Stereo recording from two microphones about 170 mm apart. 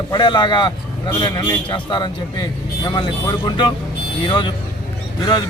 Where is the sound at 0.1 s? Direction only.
25° left (ahead or behind).